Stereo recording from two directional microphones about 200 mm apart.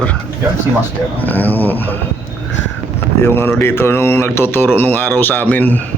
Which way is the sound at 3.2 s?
10° left (ahead or behind).